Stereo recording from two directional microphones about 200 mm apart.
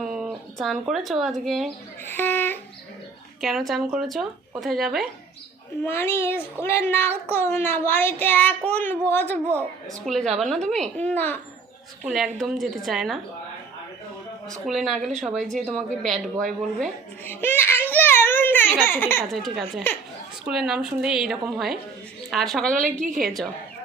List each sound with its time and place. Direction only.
0.0 s speech: 5° right (ahead or behind)
2.0 s speech: 10° left (ahead or behind)
3.4 s a woman's voice: centre (ahead or behind)
5.8 s a woman's voice: 10° left (ahead or behind)
12.0 s a woman's voice: centre (ahead or behind)
14.4 s a woman's voice: centre (ahead or behind)
19.3 s a woman's voice: centre (ahead or behind)
22.7 s a woman's voice: 40° right (ahead or behind)
23.0 s a woman's voice: centre (ahead or behind)